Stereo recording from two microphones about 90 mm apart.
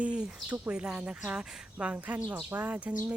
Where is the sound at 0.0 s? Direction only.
15° right (ahead or behind).